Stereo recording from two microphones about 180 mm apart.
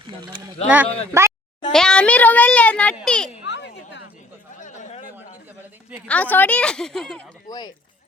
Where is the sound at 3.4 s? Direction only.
80° left.